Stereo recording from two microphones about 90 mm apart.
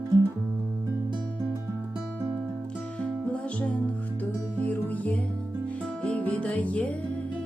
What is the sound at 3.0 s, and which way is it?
Music, 15° left (ahead or behind).